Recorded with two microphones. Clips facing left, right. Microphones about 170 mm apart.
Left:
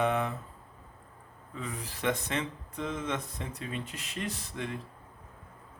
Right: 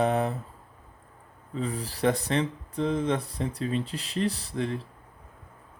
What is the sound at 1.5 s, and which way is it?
Speech, 35° right (ahead or behind).